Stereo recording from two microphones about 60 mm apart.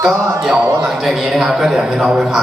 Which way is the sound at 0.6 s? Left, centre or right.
Right.